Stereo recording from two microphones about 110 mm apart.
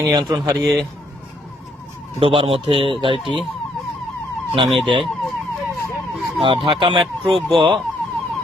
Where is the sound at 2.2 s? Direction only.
55° right (ahead or behind).